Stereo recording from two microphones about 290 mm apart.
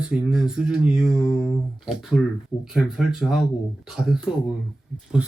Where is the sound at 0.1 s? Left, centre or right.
Centre.